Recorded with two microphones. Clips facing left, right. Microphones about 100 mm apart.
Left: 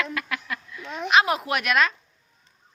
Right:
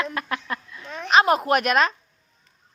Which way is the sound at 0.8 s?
15° left (ahead or behind).